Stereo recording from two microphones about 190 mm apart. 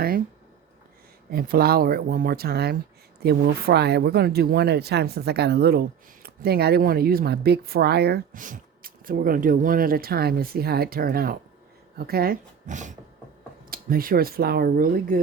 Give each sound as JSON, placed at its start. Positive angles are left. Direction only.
{"t": 1.3, "sound": "speech", "side_deg": -50}